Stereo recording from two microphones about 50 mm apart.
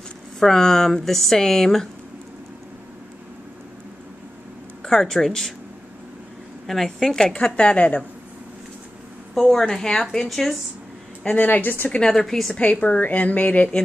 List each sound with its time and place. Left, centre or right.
0.4 s speech: centre
4.8 s speech: centre
6.7 s speech: centre
7.3 s a woman's voice: left
9.3 s speech: centre
11.4 s a woman's voice: left
12.1 s speech: centre
12.5 s a woman's voice: left